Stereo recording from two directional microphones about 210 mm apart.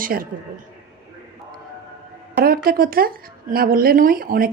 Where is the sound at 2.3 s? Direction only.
45° right (ahead or behind).